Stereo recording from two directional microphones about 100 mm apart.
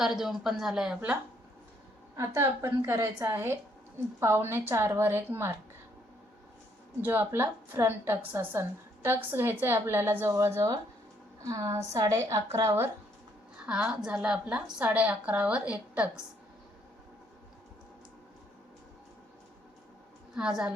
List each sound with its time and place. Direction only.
0.0 s speech: centre (ahead or behind)
2.1 s a woman's voice: 30° right (ahead or behind)
7.0 s a woman's voice: 20° right (ahead or behind)
13.6 s a woman's voice: 10° right (ahead or behind)
20.3 s a woman's voice: 5° right (ahead or behind)